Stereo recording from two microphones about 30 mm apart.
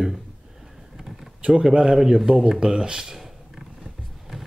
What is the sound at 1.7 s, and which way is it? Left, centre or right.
Speech, right.